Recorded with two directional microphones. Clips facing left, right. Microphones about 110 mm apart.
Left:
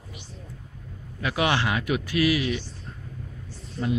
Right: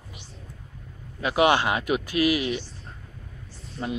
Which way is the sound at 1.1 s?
25° right (ahead or behind).